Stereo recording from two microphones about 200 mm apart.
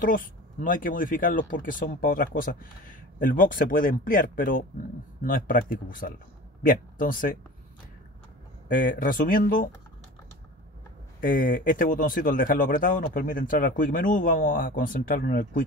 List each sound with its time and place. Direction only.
0.0 s speech: 45° left (ahead or behind)
8.6 s speech: 45° left (ahead or behind)
11.1 s speech: 45° left (ahead or behind)